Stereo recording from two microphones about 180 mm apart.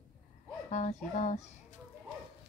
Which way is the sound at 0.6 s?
40° left (ahead or behind).